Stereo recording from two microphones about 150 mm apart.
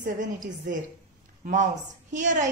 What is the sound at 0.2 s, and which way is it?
A woman's voice, 60° right (ahead or behind).